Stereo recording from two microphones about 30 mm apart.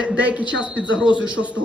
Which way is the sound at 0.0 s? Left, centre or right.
Right.